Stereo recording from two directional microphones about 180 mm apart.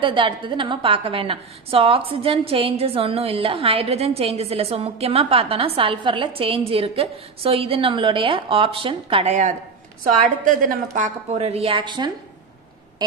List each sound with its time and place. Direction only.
0.0 s a woman's voice: 25° right (ahead or behind)
10.2 s a woman's voice: 50° right (ahead or behind); by 12.1 s 25° right (ahead or behind)